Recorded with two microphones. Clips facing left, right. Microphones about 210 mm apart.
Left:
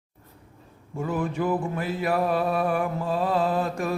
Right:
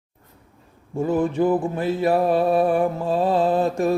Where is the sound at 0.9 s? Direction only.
30° right (ahead or behind).